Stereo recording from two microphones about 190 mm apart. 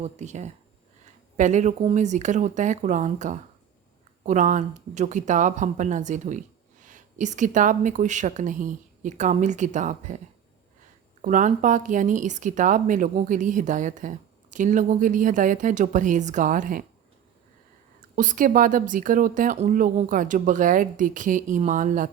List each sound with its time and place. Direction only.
0.0 s speech: 40° right (ahead or behind)
11.2 s a woman's voice: 40° right (ahead or behind)
18.2 s a woman's voice: 45° right (ahead or behind)